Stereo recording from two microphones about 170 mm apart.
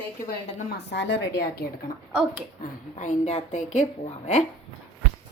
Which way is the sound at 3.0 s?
45° left (ahead or behind).